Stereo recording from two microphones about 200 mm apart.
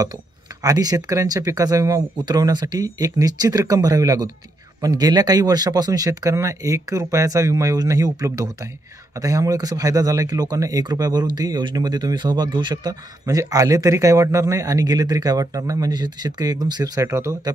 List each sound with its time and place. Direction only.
0.6 s speech: 20° right (ahead or behind)